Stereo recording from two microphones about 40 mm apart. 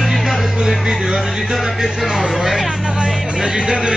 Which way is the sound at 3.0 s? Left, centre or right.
Centre.